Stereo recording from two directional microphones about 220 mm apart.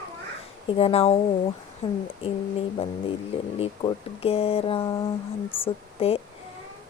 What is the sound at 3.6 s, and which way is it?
Speech, 25° left (ahead or behind).